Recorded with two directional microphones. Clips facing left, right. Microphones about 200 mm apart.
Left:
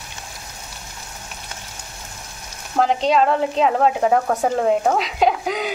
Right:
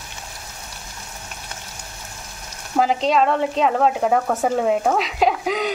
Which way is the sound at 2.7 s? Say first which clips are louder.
Left 1 dB; centre (ahead or behind).